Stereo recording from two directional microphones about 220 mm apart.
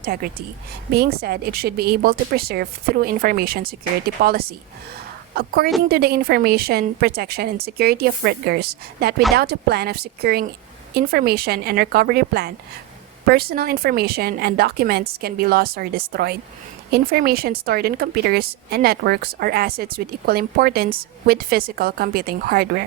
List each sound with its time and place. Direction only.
0.0 s a woman's voice: 45° right (ahead or behind)